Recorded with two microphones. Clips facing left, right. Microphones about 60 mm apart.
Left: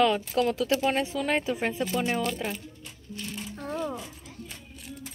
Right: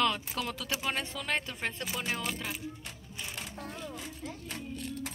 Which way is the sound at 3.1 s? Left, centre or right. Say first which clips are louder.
Left 6 dB; centre.